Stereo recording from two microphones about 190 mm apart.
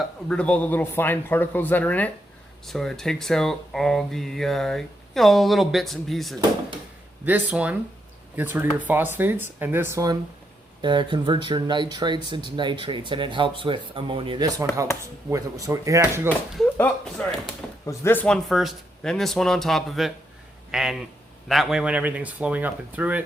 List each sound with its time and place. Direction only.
0.0 s speech: 5° left (ahead or behind); by 16.3 s 15° right (ahead or behind)
16.7 s a sound: 10° left (ahead or behind)
17.8 s speech: 10° left (ahead or behind); by 23.2 s 10° right (ahead or behind)